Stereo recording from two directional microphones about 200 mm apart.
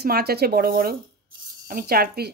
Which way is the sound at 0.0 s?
50° right (ahead or behind).